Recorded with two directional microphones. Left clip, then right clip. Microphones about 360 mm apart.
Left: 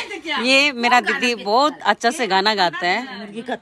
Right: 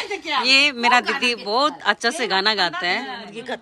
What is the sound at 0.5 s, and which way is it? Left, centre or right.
Speech, centre.